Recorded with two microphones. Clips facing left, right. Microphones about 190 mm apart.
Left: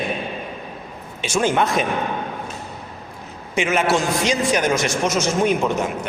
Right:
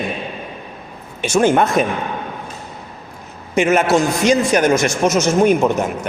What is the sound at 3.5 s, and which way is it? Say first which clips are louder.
A man's voice: right 5 dB; 45° right (ahead or behind).